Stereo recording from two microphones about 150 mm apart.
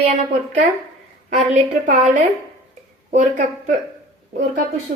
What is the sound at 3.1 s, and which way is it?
Speech, 55° right (ahead or behind).